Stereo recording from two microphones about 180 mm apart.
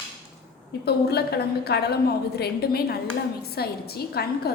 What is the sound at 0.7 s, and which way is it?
A woman's voice, 65° left (ahead or behind).